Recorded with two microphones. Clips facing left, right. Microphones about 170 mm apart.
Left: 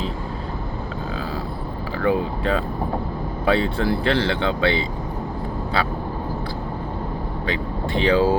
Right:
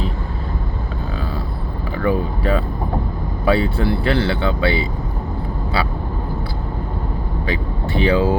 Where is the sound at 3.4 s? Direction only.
5° right (ahead or behind).